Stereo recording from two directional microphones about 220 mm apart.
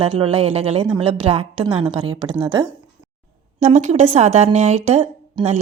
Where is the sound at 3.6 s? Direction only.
30° right (ahead or behind).